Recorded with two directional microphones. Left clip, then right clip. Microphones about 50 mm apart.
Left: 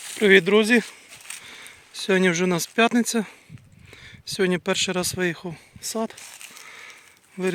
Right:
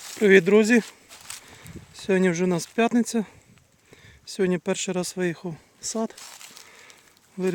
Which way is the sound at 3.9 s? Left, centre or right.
Centre.